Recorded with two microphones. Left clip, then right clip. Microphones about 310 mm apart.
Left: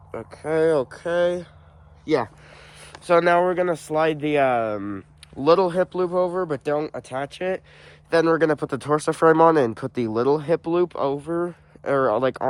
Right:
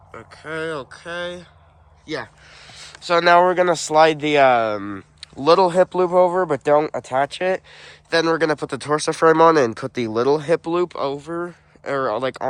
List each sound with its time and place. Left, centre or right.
0.1 s speech: centre
0.8 s speech: left
2.5 s a sound: centre
3.0 s speech: centre